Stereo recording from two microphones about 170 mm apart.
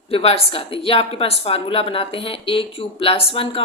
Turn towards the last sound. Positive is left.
turn(degrees=35)  # may be behind; listen again after turning